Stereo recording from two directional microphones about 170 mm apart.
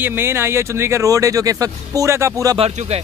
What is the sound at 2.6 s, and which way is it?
Speech, 35° right (ahead or behind).